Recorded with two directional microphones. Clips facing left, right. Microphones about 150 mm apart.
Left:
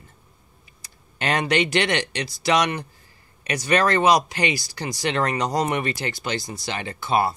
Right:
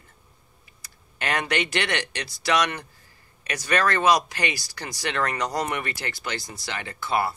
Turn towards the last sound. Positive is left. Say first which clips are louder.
# left 4 dB
turn(degrees=25)  # may be behind; listen again after turning